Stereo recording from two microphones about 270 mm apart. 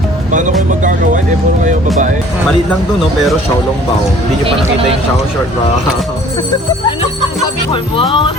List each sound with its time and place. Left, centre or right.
0.3 s speech: right
7.7 s speech: centre